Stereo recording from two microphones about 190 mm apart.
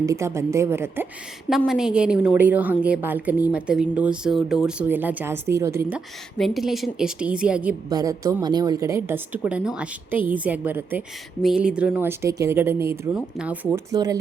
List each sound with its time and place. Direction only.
0.0 s a woman's voice: 15° right (ahead or behind)
1.5 s a woman's voice: centre (ahead or behind)
6.3 s a woman's voice: centre (ahead or behind)
7.9 s a woman's voice: 20° right (ahead or behind)
13.9 s speech: 20° right (ahead or behind)